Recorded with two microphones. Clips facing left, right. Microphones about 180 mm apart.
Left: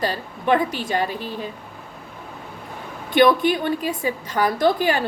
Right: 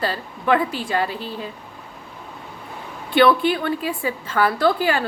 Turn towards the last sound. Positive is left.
turn(degrees=15)  # may be behind; listen again after turning